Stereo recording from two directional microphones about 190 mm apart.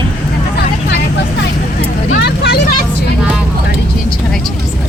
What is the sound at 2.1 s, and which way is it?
Vehicle, 60° left (ahead or behind).